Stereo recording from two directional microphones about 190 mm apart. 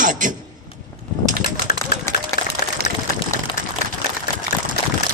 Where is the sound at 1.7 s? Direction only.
50° left (ahead or behind).